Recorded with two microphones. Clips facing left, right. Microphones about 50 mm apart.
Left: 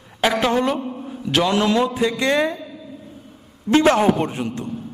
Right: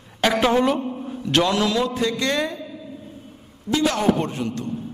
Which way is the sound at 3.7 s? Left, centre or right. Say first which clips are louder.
Left 6 dB; left.